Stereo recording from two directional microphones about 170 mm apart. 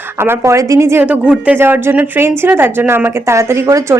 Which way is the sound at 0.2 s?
15° right (ahead or behind).